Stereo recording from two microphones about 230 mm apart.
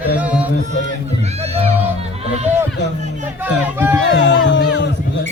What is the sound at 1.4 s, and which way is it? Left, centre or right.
Music, right.